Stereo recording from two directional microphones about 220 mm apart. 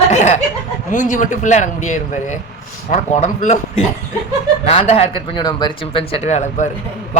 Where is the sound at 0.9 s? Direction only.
35° left (ahead or behind).